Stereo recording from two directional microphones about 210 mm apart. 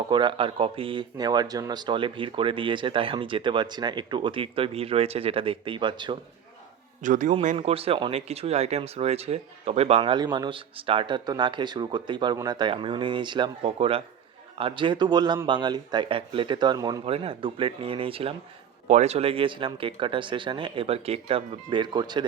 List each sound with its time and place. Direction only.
0.1 s speech: 20° right (ahead or behind)
7.0 s a man's voice: 35° right (ahead or behind); by 22.3 s 20° right (ahead or behind)